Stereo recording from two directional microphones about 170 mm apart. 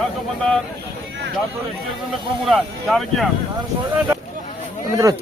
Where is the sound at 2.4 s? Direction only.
Centre (ahead or behind).